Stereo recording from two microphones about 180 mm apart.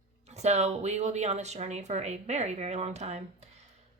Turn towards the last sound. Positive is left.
turn(degrees=-40)  # may be behind; listen again after turning